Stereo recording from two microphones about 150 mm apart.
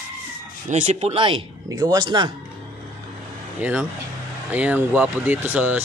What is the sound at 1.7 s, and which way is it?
Speech, 25° right (ahead or behind).